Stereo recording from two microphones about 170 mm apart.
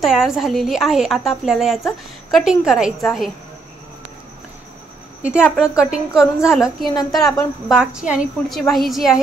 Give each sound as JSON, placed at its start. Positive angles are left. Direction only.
{"t": 0.0, "sound": "a woman's voice", "side_deg": 0}
{"t": 5.4, "sound": "a woman's voice", "side_deg": 15}
{"t": 5.9, "sound": "a woman's voice", "side_deg": -5}
{"t": 6.9, "sound": "a woman's voice", "side_deg": 20}
{"t": 7.3, "sound": "a woman's voice", "side_deg": 0}